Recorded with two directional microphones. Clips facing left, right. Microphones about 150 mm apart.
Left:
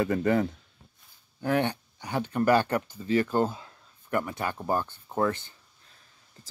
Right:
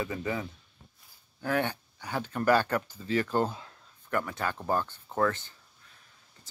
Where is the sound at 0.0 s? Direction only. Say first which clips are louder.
Left 8 dB; 60° left (ahead or behind).